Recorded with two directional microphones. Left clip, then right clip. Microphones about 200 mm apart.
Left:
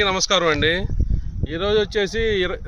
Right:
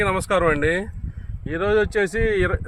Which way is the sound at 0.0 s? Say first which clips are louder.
Left 1 dB; 5° left (ahead or behind).